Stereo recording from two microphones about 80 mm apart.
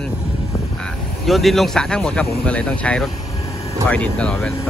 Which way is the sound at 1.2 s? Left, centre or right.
Centre.